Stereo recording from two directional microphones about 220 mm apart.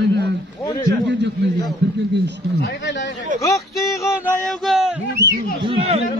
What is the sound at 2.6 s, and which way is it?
Speech, 55° left (ahead or behind).